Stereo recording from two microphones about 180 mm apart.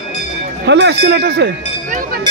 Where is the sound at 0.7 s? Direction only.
70° right (ahead or behind).